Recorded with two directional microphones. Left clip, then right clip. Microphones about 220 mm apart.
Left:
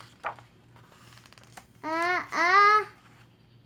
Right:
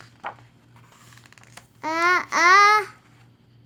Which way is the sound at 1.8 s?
45° right (ahead or behind).